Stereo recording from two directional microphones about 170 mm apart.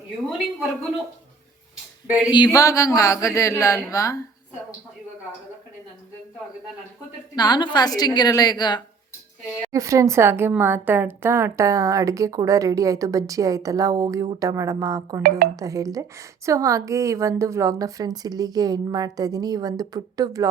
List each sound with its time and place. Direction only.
1.7 s a sound: 5° right (ahead or behind)
2.3 s speech: 25° left (ahead or behind)
7.3 s a woman's voice: 25° left (ahead or behind)
9.7 s a woman's voice: 20° right (ahead or behind)